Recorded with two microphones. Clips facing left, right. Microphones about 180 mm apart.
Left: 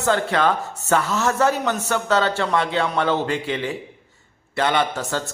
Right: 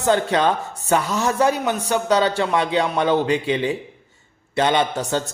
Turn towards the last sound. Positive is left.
turn(degrees=-20)  # may be behind; listen again after turning